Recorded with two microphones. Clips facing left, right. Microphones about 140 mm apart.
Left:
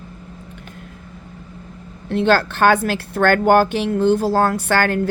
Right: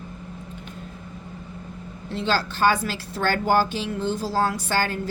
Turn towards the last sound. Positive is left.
turn(degrees=65)  # may be behind; listen again after turning